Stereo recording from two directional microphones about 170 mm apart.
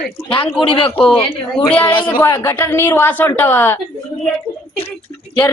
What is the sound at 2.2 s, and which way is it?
A woman's voice, 15° left (ahead or behind).